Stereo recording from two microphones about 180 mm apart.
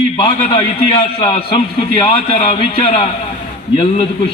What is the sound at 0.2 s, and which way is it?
A man's voice, 30° left (ahead or behind).